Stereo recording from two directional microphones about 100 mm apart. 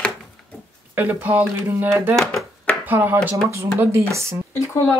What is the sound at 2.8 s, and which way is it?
Speech, 20° right (ahead or behind).